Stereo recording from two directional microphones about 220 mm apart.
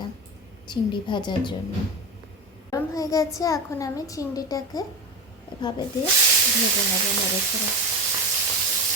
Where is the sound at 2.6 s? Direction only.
15° left (ahead or behind).